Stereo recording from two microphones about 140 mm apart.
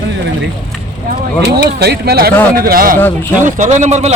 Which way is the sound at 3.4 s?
60° right (ahead or behind).